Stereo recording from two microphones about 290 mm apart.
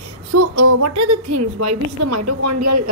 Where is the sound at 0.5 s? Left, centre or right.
Right.